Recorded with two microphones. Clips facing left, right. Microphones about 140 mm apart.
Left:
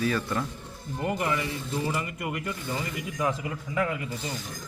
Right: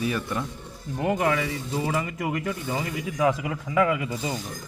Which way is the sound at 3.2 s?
90° right.